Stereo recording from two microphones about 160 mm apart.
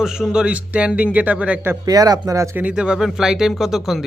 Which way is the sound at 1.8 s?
25° right (ahead or behind).